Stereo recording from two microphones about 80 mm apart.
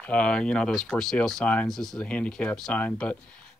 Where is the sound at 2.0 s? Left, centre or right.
Centre.